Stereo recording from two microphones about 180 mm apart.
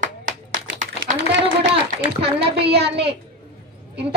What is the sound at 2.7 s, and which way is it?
Speech, 35° right (ahead or behind).